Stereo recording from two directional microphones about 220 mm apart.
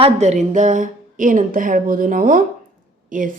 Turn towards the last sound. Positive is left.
turn(degrees=-35)  # may be behind; listen again after turning